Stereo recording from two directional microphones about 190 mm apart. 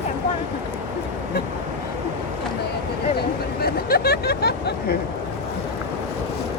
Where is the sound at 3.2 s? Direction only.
55° left (ahead or behind).